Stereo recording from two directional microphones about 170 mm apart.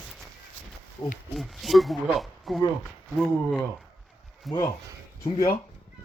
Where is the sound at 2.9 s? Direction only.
Centre (ahead or behind).